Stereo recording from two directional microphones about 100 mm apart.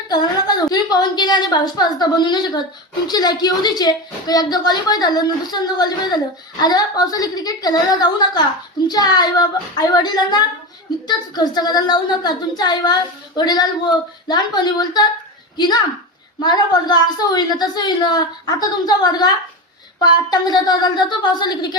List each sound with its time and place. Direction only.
0.1 s a woman's voice: 45° left (ahead or behind)